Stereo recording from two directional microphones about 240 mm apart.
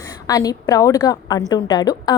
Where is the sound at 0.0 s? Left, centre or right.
Centre.